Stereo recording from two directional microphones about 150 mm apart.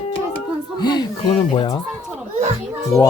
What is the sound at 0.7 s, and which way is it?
Speech, 30° left (ahead or behind).